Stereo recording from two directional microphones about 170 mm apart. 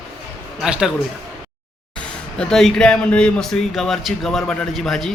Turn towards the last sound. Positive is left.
turn(degrees=0)  # may be behind; listen again after turning